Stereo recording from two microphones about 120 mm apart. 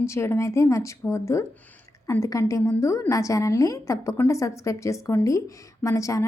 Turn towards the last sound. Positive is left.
turn(degrees=25)  # may be behind; listen again after turning